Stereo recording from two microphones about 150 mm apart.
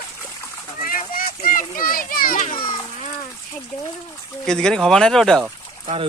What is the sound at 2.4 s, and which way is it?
Speech, 35° left (ahead or behind).